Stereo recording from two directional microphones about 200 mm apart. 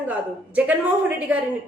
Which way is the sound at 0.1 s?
10° right (ahead or behind).